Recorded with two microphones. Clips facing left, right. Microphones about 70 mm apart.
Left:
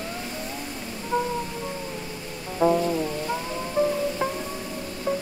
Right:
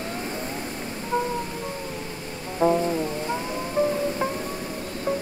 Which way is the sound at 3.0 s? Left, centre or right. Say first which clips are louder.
Right 1 dB; centre.